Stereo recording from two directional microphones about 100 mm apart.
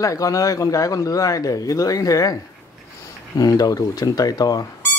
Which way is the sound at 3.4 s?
40° left (ahead or behind).